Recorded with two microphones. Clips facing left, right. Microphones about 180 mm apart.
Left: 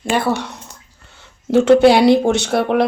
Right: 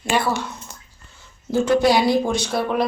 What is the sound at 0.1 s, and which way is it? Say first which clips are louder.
Speech: left 2 dB; 50° left (ahead or behind).